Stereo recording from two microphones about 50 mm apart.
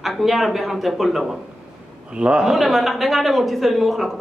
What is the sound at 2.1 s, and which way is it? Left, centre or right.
Speech, right.